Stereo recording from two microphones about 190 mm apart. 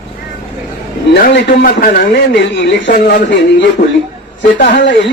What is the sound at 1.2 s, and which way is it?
A man's voice, 50° left (ahead or behind).